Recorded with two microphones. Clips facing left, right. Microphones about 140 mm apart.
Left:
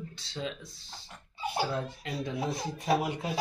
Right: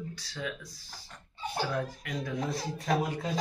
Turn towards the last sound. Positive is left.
turn(degrees=15)  # may be behind; listen again after turning